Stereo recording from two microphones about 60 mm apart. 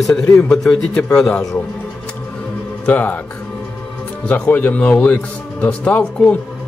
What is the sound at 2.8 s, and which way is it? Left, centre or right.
Speech, left.